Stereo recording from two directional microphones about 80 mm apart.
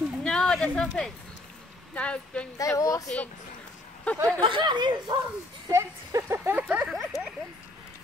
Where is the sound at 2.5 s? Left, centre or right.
Left.